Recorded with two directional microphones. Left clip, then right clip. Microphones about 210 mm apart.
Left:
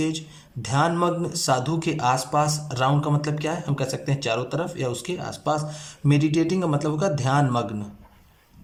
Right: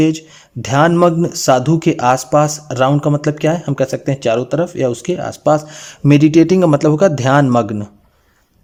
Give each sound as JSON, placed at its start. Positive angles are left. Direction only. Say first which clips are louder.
{"t": 0.0, "sound": "speech", "louder": "right 12 dB", "side_deg": -40}